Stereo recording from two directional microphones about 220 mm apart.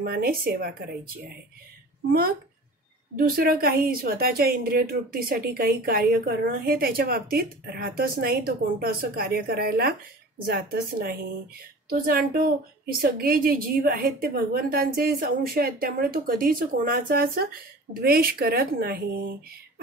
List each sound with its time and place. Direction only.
0.0 s a woman's voice: 45° right (ahead or behind)
3.2 s a woman's voice: 40° right (ahead or behind)